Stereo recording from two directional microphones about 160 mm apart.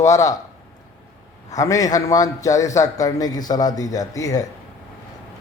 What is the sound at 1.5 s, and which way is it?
A man's voice, 20° left (ahead or behind).